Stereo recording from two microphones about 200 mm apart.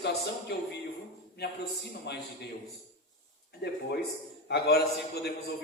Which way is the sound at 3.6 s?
60° left (ahead or behind).